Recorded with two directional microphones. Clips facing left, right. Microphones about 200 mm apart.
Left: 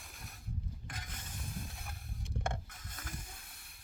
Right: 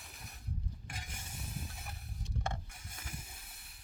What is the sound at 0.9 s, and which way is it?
Mechanisms, 10° right (ahead or behind).